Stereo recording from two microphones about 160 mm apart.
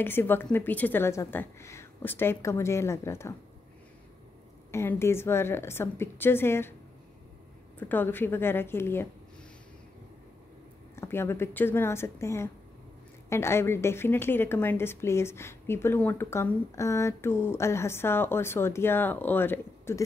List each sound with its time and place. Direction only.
0.0 s a woman's voice: 15° left (ahead or behind)
4.6 s a woman's voice: 15° left (ahead or behind)
7.9 s a woman's voice: 15° left (ahead or behind)
11.0 s a woman's voice: 15° left (ahead or behind)